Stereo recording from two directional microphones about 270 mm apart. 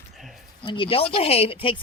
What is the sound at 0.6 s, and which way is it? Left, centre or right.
A woman's voice, centre.